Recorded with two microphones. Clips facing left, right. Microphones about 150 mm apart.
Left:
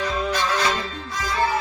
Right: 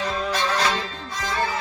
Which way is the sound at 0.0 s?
35° right (ahead or behind).